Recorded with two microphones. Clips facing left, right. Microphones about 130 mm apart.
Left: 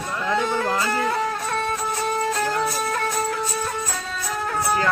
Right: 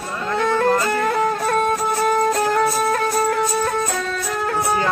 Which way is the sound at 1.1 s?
50° right (ahead or behind).